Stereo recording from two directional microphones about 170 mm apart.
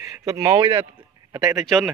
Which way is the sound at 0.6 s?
30° right (ahead or behind).